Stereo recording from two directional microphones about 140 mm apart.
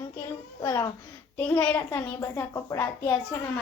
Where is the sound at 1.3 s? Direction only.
10° left (ahead or behind).